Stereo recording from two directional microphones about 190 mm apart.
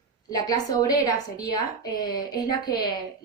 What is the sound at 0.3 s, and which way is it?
A woman's voice, 20° left (ahead or behind).